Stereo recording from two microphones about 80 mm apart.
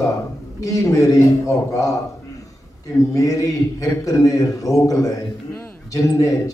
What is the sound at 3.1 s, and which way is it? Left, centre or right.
A man's voice, left.